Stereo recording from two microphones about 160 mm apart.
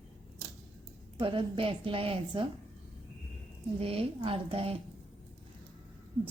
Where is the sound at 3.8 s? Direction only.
35° right (ahead or behind).